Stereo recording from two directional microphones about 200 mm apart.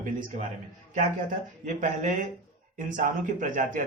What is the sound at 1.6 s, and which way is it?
Speech, 40° right (ahead or behind).